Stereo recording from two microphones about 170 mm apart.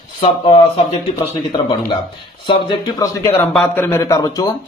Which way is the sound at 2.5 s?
30° left (ahead or behind).